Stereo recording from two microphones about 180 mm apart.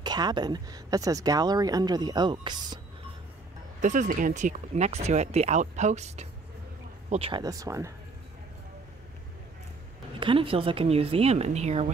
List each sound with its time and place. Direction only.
0.0 s speech: 25° right (ahead or behind)
3.8 s speech: 45° right (ahead or behind)
7.4 s speech: 20° right (ahead or behind)
10.2 s speech: 30° right (ahead or behind)